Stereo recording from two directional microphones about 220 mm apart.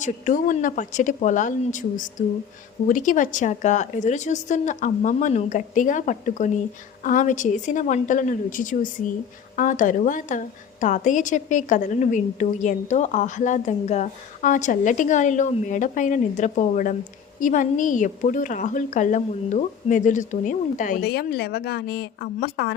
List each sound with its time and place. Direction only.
0.0 s a woman's voice: 35° left (ahead or behind)